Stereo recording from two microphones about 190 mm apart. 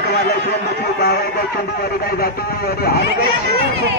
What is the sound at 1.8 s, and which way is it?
A man's voice, 55° left (ahead or behind).